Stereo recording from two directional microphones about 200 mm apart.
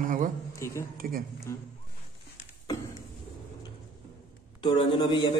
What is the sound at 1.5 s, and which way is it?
Speech, 15° left (ahead or behind).